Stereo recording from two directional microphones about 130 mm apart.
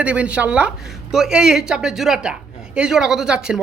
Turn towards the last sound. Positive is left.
turn(degrees=-5)  # may be behind; listen again after turning